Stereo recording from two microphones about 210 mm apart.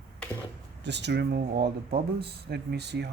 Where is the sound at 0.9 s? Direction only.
55° right (ahead or behind).